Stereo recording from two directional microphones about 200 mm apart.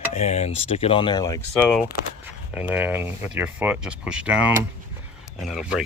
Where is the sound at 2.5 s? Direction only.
5° right (ahead or behind).